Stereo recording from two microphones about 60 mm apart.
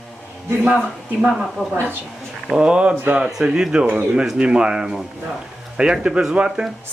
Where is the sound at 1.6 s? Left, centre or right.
Left.